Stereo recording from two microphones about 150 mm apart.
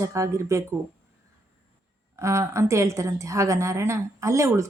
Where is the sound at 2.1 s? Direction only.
20° right (ahead or behind).